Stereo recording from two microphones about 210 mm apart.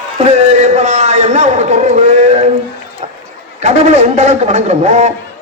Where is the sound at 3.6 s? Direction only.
35° right (ahead or behind).